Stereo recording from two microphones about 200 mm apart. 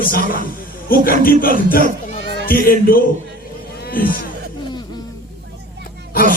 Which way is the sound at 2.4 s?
45° left (ahead or behind).